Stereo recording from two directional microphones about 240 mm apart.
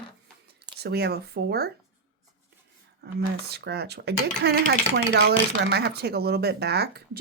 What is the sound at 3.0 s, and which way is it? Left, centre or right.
Speech, right.